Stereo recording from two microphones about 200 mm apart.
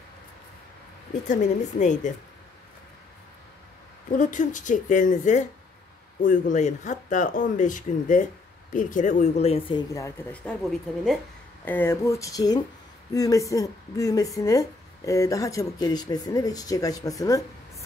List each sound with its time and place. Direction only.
1.2 s speech: 40° left (ahead or behind)
4.2 s speech: 40° left (ahead or behind); by 17.5 s 15° left (ahead or behind)